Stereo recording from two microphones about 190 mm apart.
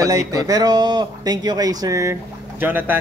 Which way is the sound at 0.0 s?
20° right (ahead or behind).